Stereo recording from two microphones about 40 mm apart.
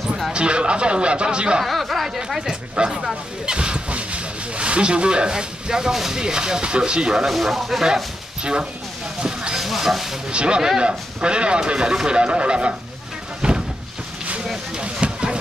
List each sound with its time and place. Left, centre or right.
0.3 s speech: right
1.6 s speech: centre
2.0 s a woman's voice: centre
2.7 s speech: right
7.2 s speech: centre
9.2 s a sound: right
9.6 s speech: centre
10.3 s speech: right
13.4 s a sound: right
14.8 s a sound: right